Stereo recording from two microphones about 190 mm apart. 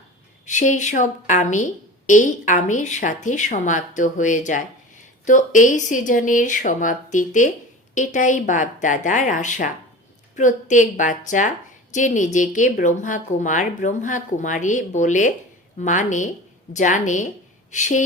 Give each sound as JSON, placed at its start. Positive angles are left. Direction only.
{"t": 0.4, "sound": "a woman's voice", "side_deg": 40}